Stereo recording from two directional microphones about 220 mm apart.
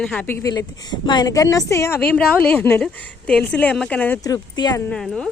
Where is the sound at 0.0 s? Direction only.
5° left (ahead or behind).